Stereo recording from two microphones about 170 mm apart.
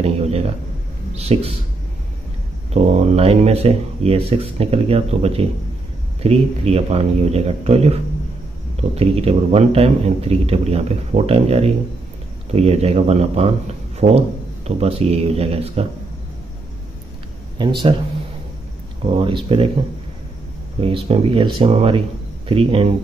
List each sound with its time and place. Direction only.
0.0 s speech: 35° right (ahead or behind)
2.7 s speech: 40° right (ahead or behind)
17.6 s speech: 25° right (ahead or behind)
19.1 s speech: 30° right (ahead or behind)
20.8 s speech: 35° right (ahead or behind)